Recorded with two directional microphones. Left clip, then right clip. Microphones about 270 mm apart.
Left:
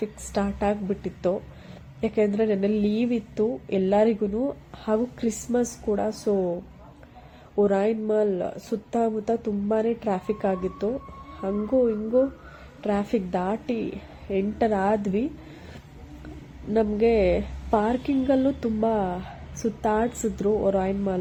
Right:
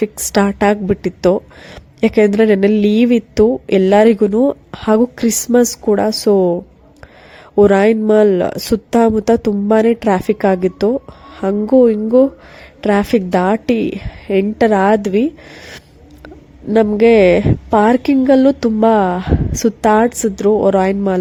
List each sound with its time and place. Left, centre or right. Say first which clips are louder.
0.0 s speech: right 13 dB; right
16.7 s speech: right 12 dB; right